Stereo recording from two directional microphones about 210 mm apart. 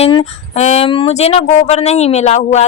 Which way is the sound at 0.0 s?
25° left (ahead or behind).